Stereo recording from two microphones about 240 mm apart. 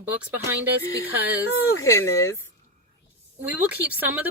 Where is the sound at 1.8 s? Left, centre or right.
Centre.